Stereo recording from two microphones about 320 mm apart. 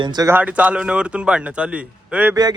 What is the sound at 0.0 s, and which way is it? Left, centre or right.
Speech, centre.